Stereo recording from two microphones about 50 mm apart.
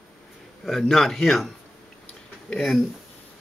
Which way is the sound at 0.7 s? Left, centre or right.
Centre.